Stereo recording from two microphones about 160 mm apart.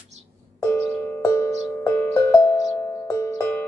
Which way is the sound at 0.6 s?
20° left (ahead or behind).